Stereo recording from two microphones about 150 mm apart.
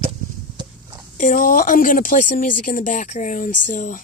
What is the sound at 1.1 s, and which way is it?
Speech, 60° left (ahead or behind).